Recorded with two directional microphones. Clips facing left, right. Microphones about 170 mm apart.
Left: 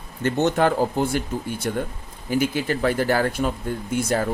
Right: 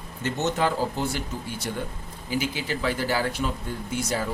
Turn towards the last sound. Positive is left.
turn(degrees=55)  # may be behind; listen again after turning